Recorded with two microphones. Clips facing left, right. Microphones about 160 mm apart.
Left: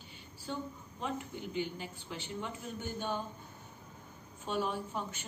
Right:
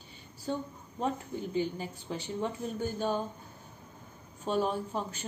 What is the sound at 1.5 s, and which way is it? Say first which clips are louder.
Speech: right 5 dB; 40° right (ahead or behind).